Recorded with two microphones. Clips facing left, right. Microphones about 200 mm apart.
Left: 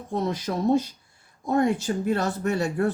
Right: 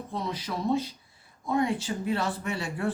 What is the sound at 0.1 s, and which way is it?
Speech, 45° left (ahead or behind).